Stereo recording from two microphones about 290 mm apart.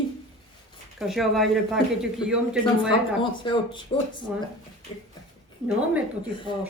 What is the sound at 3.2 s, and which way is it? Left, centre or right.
Speech, centre.